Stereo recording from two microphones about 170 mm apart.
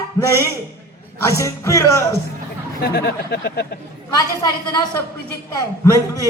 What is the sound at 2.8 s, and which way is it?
Speech, 65° left (ahead or behind).